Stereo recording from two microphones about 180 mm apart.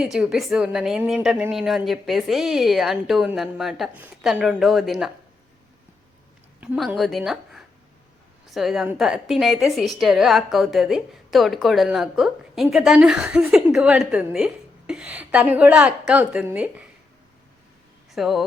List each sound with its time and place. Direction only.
0.0 s a woman's voice: 5° right (ahead or behind)
6.6 s a woman's voice: 5° right (ahead or behind)
18.1 s speech: centre (ahead or behind)